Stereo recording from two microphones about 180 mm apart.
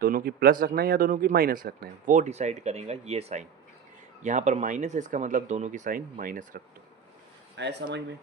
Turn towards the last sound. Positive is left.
turn(degrees=-70)  # may be behind; listen again after turning